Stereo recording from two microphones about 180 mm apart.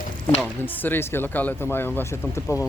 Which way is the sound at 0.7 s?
10° left (ahead or behind).